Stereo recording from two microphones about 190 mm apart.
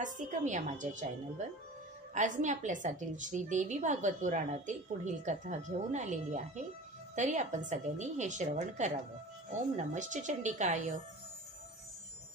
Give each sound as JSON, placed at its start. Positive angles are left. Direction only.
{"t": 0.0, "sound": "a woman's voice", "side_deg": -40}
{"t": 2.1, "sound": "a woman's voice", "side_deg": -40}